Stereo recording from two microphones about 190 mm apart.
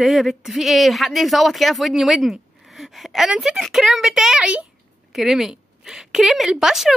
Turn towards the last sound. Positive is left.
turn(degrees=0)  # may be behind; listen again after turning